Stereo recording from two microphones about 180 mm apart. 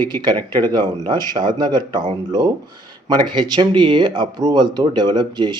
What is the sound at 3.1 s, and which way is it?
Speech, 25° right (ahead or behind).